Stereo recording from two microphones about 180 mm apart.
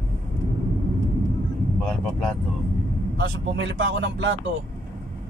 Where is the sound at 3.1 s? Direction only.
90° right.